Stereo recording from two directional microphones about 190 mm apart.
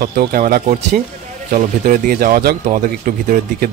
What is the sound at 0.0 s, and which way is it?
Speech, 50° right (ahead or behind).